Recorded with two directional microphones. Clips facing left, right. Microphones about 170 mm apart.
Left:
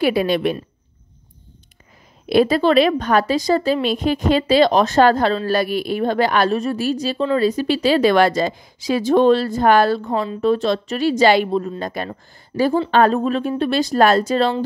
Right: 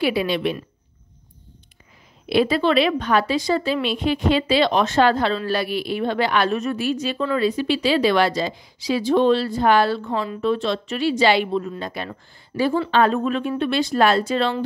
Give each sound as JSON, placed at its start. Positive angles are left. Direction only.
{"t": 0.0, "sound": "a woman's voice", "side_deg": 45}
{"t": 2.2, "sound": "a woman's voice", "side_deg": 45}